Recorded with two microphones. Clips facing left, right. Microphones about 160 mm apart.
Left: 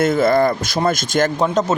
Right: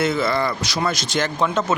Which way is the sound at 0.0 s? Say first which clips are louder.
Left 6 dB; 50° left (ahead or behind).